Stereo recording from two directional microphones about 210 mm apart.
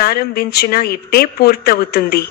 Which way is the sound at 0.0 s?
50° left (ahead or behind).